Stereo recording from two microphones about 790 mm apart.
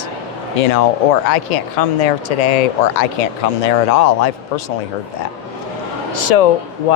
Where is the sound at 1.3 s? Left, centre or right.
Left.